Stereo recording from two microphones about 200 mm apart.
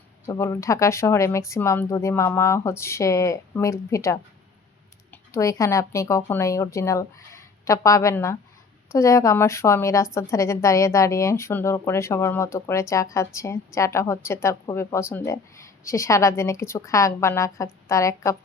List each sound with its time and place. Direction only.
0.3 s a woman's voice: 15° left (ahead or behind)